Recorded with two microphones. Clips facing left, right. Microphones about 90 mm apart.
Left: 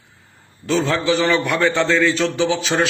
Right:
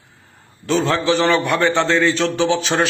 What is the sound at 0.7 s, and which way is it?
A man's voice, 20° right (ahead or behind).